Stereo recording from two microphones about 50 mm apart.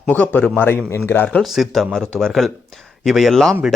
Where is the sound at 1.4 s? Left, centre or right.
Centre.